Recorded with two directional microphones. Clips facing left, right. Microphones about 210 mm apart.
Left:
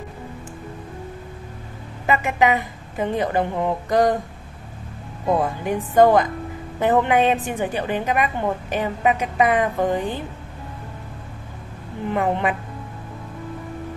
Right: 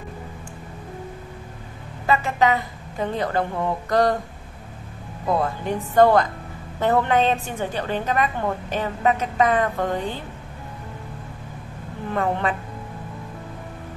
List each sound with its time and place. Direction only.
2.0 s a woman's voice: 15° left (ahead or behind)
5.3 s a woman's voice: 15° left (ahead or behind)
12.1 s a woman's voice: 15° left (ahead or behind)